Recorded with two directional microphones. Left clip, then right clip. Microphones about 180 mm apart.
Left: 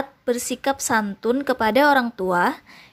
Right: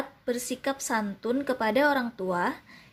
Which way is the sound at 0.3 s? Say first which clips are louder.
Left 8 dB; 25° left (ahead or behind).